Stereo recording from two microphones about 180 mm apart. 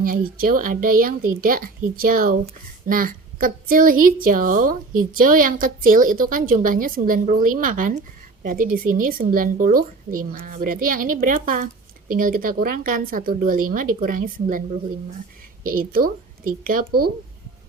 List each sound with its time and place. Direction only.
0.0 s a woman's voice: 50° right (ahead or behind)
15.6 s a woman's voice: 55° right (ahead or behind)